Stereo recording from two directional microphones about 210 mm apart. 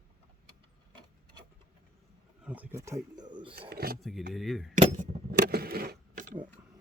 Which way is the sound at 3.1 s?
20° right (ahead or behind).